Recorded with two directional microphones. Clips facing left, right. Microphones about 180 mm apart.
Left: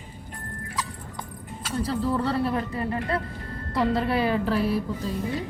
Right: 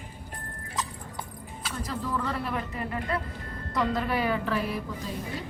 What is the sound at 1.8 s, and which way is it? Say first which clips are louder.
Speech: left 6 dB; 35° left (ahead or behind).